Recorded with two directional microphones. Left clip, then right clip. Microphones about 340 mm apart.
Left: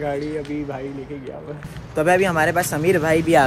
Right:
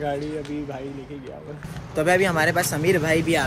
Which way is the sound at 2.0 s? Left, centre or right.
Centre.